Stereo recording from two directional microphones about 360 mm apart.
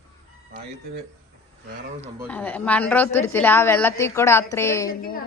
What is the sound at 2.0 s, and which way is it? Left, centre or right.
A woman's voice, centre.